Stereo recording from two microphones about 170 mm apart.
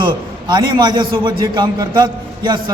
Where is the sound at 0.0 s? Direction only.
25° right (ahead or behind).